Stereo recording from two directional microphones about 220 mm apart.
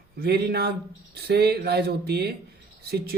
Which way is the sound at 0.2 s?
50° right (ahead or behind).